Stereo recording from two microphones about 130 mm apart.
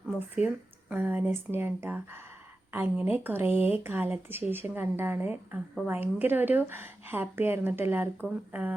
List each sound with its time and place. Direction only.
0.3 s a woman's voice: 10° right (ahead or behind)